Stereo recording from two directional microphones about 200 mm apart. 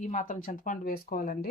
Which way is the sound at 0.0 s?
40° left (ahead or behind).